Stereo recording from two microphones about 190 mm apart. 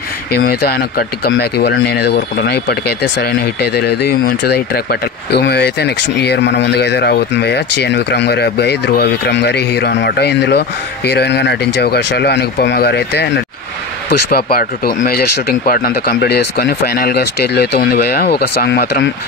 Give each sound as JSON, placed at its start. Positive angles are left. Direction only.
{"t": 0.5, "sound": "speech", "side_deg": 55}